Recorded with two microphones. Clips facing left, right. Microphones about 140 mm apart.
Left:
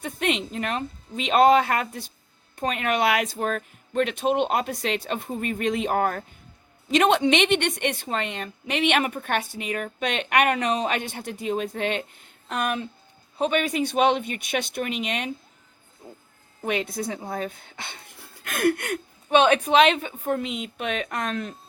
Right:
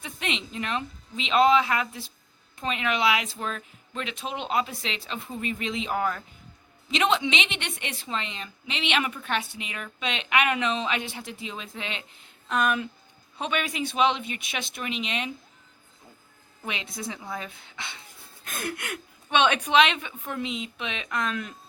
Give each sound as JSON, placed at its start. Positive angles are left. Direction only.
{"t": 0.0, "sound": "a woman's voice", "side_deg": 50}
{"t": 16.6, "sound": "a woman's voice", "side_deg": 50}
{"t": 18.4, "sound": "a woman's voice", "side_deg": 65}